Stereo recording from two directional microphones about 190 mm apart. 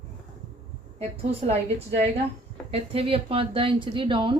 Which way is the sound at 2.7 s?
30° right (ahead or behind).